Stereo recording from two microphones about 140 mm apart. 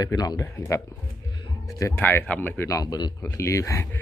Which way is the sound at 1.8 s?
15° left (ahead or behind).